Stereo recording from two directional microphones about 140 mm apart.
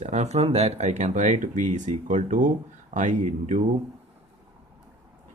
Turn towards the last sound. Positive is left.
turn(degrees=-60)  # may be behind; listen again after turning